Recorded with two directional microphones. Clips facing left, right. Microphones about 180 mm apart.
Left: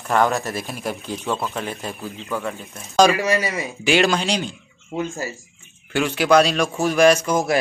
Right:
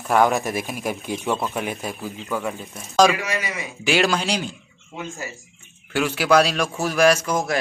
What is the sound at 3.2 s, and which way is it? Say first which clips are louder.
Speech: left 7 dB; 35° left (ahead or behind).